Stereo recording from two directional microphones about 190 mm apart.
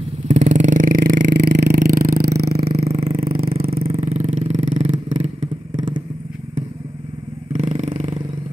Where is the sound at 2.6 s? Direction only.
30° right (ahead or behind).